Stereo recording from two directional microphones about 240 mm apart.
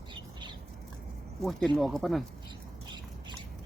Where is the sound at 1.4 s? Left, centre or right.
Centre.